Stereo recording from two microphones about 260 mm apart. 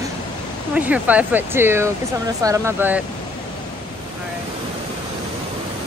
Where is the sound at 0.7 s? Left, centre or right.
Centre.